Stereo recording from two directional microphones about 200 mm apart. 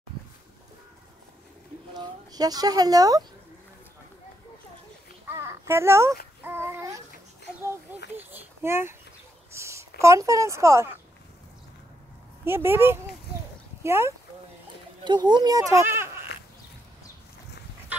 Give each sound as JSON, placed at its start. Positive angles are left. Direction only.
{"t": 2.0, "sound": "speech", "side_deg": -20}
{"t": 5.3, "sound": "a sound", "side_deg": -10}
{"t": 6.4, "sound": "babbling", "side_deg": -10}
{"t": 8.2, "sound": "a child's voice", "side_deg": -10}
{"t": 12.4, "sound": "speech", "side_deg": -10}